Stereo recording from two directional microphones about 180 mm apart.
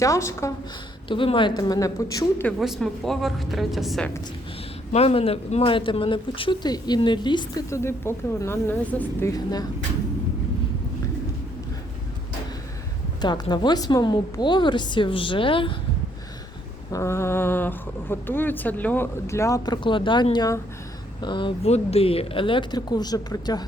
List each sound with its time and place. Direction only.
0.0 s speech: 15° left (ahead or behind)
1.0 s speech: 30° left (ahead or behind)
2.5 s a woman's voice: centre (ahead or behind)
4.9 s speech: 35° left (ahead or behind); by 9.3 s 10° left (ahead or behind)
13.2 s speech: 25° left (ahead or behind)
16.9 s speech: 15° left (ahead or behind)